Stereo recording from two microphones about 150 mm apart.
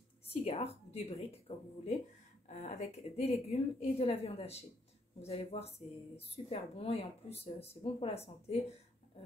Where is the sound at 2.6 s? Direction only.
45° left (ahead or behind).